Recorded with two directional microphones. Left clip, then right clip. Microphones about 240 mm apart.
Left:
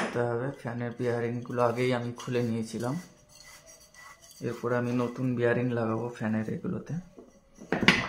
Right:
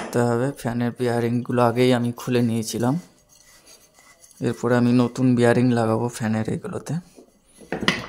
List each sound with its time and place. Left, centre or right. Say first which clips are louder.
0.1 s speech: right 8 dB; right
4.4 s speech: right 9 dB; right